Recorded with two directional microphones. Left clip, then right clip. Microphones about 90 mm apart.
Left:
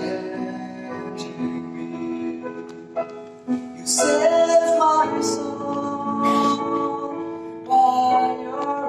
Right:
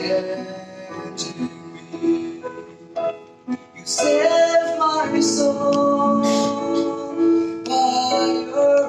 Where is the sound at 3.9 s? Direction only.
35° right (ahead or behind).